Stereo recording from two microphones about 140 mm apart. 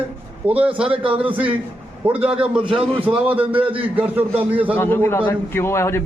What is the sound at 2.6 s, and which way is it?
Speech, 40° right (ahead or behind).